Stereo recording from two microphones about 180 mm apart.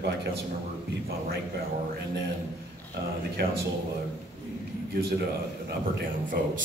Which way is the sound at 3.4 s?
65° right (ahead or behind).